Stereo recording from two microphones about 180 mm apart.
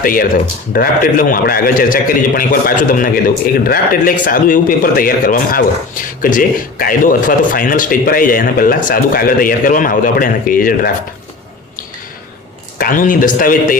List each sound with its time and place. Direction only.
0.0 s a man's voice: 50° left (ahead or behind)
12.8 s a man's voice: 50° left (ahead or behind)